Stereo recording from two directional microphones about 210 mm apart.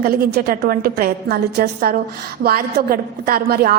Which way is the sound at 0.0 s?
50° right (ahead or behind).